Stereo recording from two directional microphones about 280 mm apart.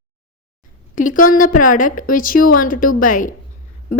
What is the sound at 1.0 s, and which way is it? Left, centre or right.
A woman's voice, left.